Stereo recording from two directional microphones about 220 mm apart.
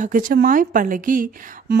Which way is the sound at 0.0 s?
40° right (ahead or behind).